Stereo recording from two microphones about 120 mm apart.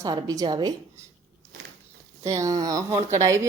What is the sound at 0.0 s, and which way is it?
Speech, 30° right (ahead or behind).